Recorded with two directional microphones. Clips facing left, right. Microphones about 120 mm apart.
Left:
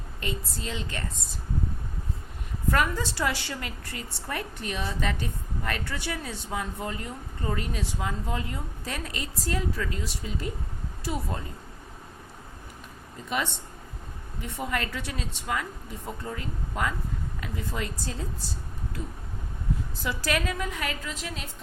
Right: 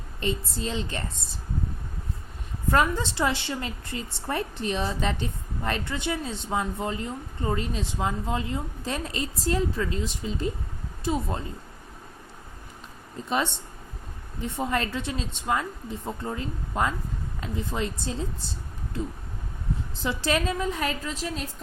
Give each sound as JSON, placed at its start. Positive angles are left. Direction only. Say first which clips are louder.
{"t": 0.2, "sound": "a woman's voice", "louder": "right 5 dB", "side_deg": -30}
{"t": 2.6, "sound": "a woman's voice", "louder": "right 3 dB", "side_deg": -25}
{"t": 14.4, "sound": "a woman's voice", "louder": "right 4 dB", "side_deg": -25}
{"t": 20.0, "sound": "a woman's voice", "louder": "right 4 dB", "side_deg": -25}